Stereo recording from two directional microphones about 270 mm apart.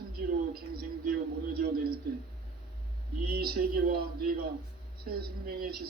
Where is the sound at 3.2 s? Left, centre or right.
Right.